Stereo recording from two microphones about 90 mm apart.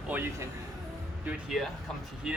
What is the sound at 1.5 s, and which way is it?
Speech, centre (ahead or behind).